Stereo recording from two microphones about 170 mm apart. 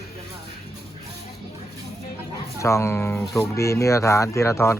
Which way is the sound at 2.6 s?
15° left (ahead or behind).